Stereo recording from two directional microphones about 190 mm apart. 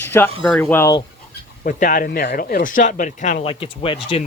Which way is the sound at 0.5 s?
10° left (ahead or behind).